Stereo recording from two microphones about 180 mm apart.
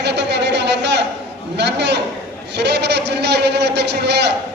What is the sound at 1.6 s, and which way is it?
A man's voice, 70° right (ahead or behind).